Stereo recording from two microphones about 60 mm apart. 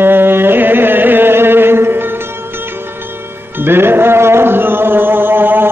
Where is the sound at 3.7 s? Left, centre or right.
Right.